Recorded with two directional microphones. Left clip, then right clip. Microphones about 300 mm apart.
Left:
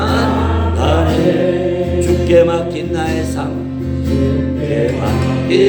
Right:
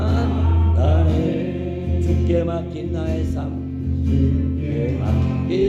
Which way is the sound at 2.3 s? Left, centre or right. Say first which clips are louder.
Left 12 dB; centre.